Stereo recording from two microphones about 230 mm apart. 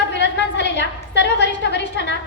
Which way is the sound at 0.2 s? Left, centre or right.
Left.